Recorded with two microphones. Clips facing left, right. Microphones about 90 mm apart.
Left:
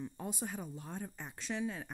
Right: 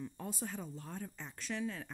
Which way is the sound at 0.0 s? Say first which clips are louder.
Left 1 dB; 15° left (ahead or behind).